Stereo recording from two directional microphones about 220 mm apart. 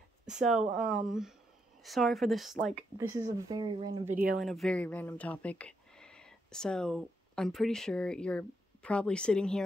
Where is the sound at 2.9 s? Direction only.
15° right (ahead or behind).